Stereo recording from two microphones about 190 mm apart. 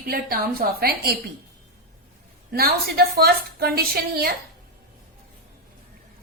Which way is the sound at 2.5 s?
55° right (ahead or behind).